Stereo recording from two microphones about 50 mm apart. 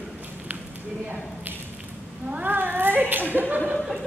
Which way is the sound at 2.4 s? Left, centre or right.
Right.